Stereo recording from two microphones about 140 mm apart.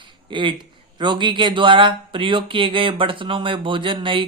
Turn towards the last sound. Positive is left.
turn(degrees=-35)  # may be behind; listen again after turning